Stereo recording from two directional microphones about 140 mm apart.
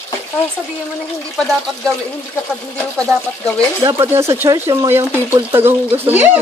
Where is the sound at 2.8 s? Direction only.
5° left (ahead or behind).